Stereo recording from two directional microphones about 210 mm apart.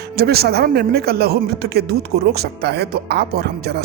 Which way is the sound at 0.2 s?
50° right (ahead or behind).